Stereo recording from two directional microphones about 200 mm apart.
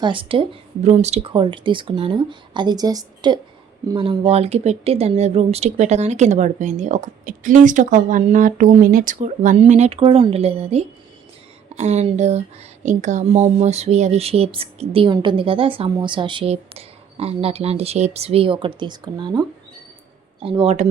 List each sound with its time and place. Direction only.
0.0 s speech: 25° right (ahead or behind)